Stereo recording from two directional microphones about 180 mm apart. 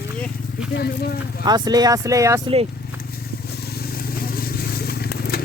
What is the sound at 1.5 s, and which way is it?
Speech, 20° right (ahead or behind).